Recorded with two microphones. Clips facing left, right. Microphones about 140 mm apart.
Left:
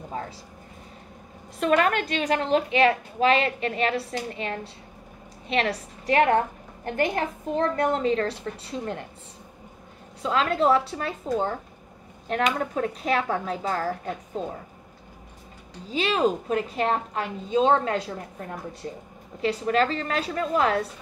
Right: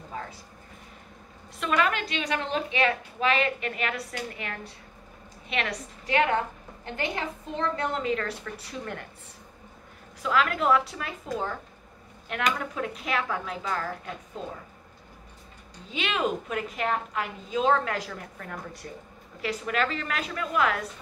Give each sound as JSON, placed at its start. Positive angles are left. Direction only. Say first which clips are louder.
{"t": 1.6, "sound": "a woman's voice", "louder": "left 5 dB", "side_deg": 45}
{"t": 10.2, "sound": "a woman's voice", "louder": "left 3 dB", "side_deg": 30}
{"t": 15.9, "sound": "a woman's voice", "louder": "left 5 dB", "side_deg": 35}